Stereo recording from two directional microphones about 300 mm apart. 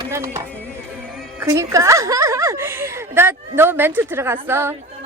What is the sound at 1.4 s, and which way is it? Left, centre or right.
A woman's voice, centre.